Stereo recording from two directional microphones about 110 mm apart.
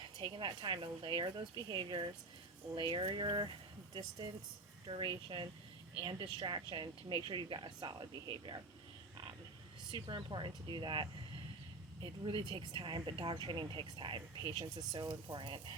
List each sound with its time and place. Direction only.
0.2 s speech: 45° right (ahead or behind)
4.9 s speech: 45° right (ahead or behind)
9.9 s speech: 45° right (ahead or behind)